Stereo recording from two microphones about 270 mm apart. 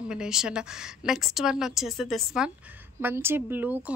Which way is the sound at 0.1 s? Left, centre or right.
Centre.